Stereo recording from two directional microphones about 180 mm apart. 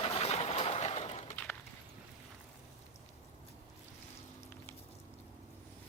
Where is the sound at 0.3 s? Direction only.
35° left (ahead or behind).